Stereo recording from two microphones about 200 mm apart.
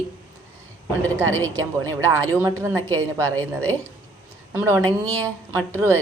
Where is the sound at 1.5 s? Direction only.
15° right (ahead or behind).